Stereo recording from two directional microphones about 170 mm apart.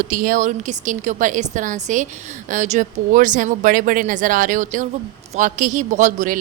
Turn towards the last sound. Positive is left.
turn(degrees=-50)  # may be behind; listen again after turning